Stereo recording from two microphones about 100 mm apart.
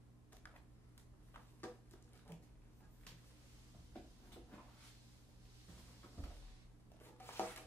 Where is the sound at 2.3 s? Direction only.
20° left (ahead or behind).